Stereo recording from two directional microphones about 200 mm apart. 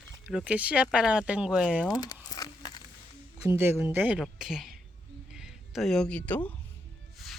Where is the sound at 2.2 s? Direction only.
20° left (ahead or behind).